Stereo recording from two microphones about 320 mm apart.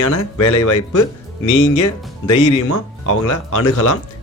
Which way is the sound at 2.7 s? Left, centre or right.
Left.